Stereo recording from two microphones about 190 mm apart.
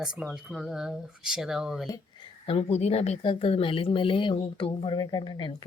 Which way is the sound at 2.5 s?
30° left (ahead or behind).